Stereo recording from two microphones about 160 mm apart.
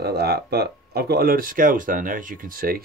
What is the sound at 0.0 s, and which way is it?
Speech, 85° right.